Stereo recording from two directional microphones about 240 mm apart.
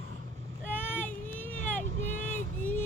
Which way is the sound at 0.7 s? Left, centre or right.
Centre.